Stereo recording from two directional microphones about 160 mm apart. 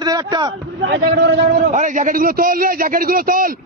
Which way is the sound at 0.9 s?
90° right.